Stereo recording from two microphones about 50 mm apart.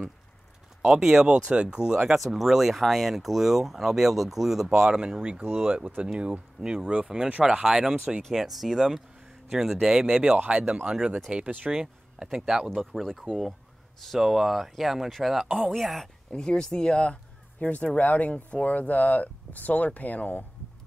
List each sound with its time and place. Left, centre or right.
0.8 s speech: centre
1.3 s speech: right
2.1 s speech: centre
5.4 s speech: right
6.0 s speech: right
6.6 s speech: centre
8.2 s speech: centre
10.3 s speech: right; by 13.1 s centre
13.1 s speech: centre
14.2 s speech: centre
16.3 s speech: centre; by 20.4 s left